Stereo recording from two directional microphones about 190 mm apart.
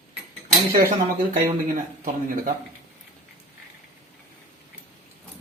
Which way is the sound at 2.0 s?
45° right (ahead or behind).